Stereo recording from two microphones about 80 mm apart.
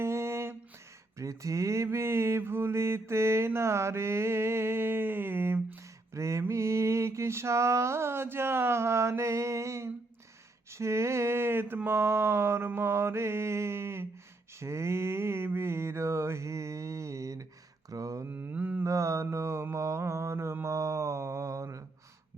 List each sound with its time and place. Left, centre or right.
0.0 s a sound: right
1.2 s mantra: right
6.1 s mantra: right
17.9 s speech: right
18.3 s mantra: right
18.9 s mantra: right